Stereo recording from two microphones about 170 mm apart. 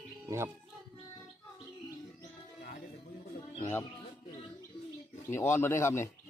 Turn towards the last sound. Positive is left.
turn(degrees=15)  # may be behind; listen again after turning